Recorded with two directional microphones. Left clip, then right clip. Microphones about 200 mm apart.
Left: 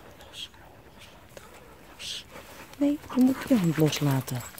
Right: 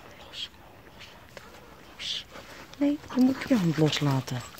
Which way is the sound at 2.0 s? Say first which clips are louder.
Right 3 dB; 20° left (ahead or behind).